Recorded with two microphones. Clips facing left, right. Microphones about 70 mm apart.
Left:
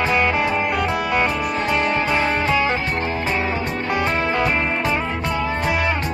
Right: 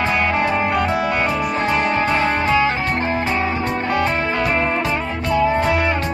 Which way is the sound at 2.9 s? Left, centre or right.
Right.